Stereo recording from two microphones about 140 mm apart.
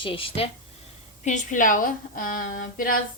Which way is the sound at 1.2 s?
65° left (ahead or behind).